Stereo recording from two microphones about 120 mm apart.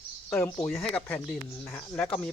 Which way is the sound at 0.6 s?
5° left (ahead or behind).